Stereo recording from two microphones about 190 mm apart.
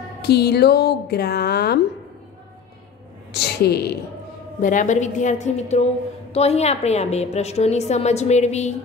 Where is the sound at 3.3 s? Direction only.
60° left (ahead or behind).